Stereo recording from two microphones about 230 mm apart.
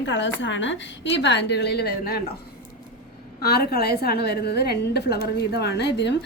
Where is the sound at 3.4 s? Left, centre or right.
Left.